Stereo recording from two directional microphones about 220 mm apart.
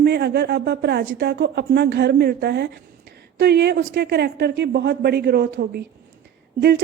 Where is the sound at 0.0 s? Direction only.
50° right (ahead or behind).